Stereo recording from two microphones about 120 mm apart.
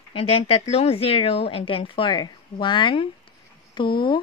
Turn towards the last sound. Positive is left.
turn(degrees=40)  # may be behind; listen again after turning